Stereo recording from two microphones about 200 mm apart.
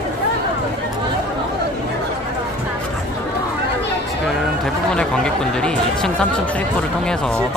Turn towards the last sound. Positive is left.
turn(degrees=5)  # may be behind; listen again after turning